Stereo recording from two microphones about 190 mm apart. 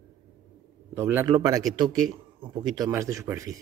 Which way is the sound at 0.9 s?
10° right (ahead or behind).